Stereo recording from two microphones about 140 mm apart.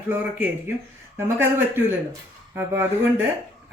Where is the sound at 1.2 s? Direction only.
15° right (ahead or behind).